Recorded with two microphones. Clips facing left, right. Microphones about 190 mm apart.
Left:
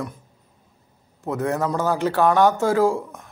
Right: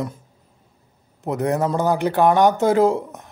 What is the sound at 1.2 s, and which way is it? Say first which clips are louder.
Speech: right 2 dB; 20° right (ahead or behind).